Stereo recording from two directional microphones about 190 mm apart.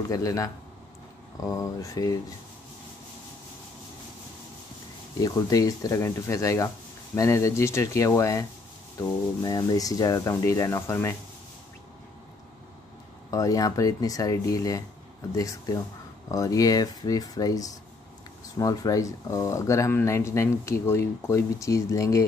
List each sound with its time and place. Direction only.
0.1 s speech: 15° left (ahead or behind)
5.2 s speech: 20° left (ahead or behind)
13.3 s speech: 20° left (ahead or behind)